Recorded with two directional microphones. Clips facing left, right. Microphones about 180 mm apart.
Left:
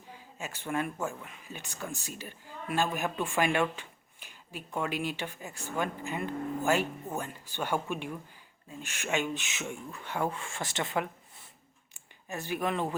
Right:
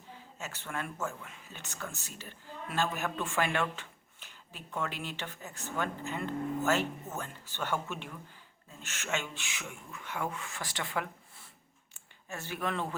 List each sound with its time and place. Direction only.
0.3 s speech: 15° left (ahead or behind)
12.3 s speech: 15° left (ahead or behind)